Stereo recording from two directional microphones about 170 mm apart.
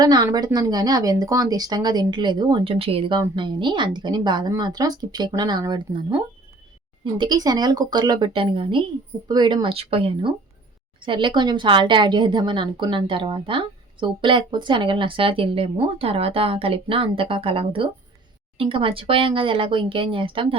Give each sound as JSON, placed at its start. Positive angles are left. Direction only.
{"t": 0.0, "sound": "speech", "side_deg": -25}